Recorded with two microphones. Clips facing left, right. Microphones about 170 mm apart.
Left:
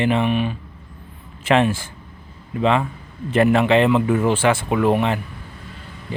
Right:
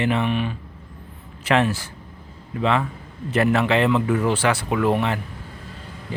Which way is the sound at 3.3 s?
25° left (ahead or behind).